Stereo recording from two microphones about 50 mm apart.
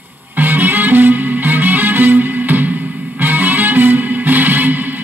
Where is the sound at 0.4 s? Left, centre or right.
Right.